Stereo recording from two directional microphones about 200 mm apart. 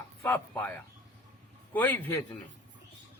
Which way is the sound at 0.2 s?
10° left (ahead or behind).